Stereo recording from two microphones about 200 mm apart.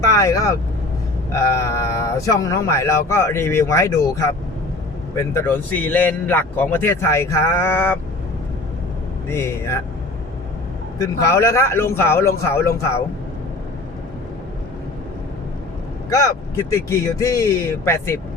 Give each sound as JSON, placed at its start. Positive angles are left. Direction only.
{"t": 0.0, "sound": "a man's voice", "side_deg": 15}
{"t": 9.3, "sound": "a man's voice", "side_deg": 15}
{"t": 10.9, "sound": "a man's voice", "side_deg": 15}
{"t": 16.7, "sound": "a man's voice", "side_deg": 15}